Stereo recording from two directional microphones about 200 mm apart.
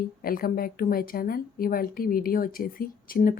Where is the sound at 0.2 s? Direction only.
45° left (ahead or behind).